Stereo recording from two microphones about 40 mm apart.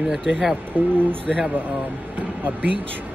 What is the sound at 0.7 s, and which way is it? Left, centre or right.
Speech, left.